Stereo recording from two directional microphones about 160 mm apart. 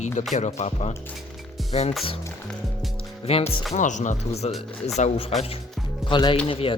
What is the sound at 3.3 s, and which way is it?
Speech, 40° left (ahead or behind).